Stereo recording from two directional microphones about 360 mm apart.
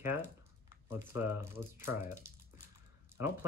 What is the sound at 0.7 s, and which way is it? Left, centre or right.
Speech, centre.